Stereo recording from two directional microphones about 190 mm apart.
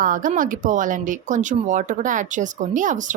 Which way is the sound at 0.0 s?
45° right (ahead or behind).